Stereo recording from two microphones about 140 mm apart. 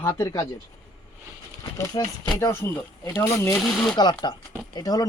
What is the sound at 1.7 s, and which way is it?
Speech, 25° left (ahead or behind).